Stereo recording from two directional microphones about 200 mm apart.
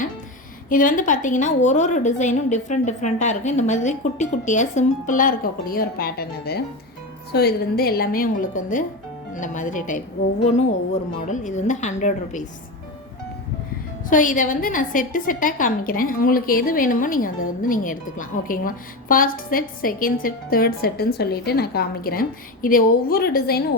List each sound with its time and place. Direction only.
0.7 s a woman's voice: 40° left (ahead or behind)
11.3 s a woman's voice: 35° left (ahead or behind)
14.1 s a woman's voice: 40° left (ahead or behind)